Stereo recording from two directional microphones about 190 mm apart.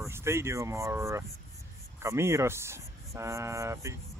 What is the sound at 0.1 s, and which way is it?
Speech, 15° right (ahead or behind).